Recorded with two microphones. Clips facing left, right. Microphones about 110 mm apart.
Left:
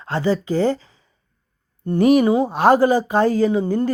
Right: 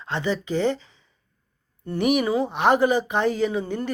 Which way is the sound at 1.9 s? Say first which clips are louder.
Left 7 dB; 30° left (ahead or behind).